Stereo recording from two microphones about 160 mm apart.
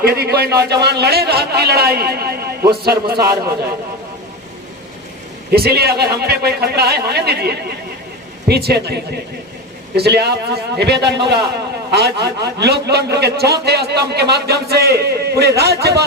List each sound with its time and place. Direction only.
0.0 s a man's voice: 75° right (ahead or behind)
5.5 s a man's voice: 75° right (ahead or behind)